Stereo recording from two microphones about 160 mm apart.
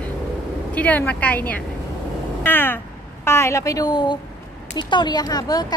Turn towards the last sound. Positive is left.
turn(degrees=25)  # may be behind; listen again after turning